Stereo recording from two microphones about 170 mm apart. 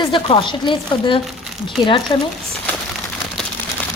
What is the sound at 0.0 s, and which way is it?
A woman's voice, 30° left (ahead or behind).